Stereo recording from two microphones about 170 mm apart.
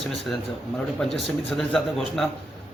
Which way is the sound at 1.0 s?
Centre (ahead or behind).